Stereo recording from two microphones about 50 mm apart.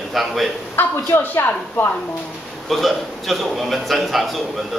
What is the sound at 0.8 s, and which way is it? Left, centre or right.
Speech, left.